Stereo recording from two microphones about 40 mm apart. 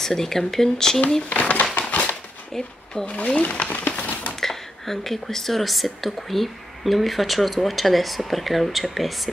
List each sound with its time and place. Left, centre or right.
0.0 s speech: centre
1.4 s a sound: left
2.5 s speech: centre
3.4 s speech: left
4.4 s a woman's voice: centre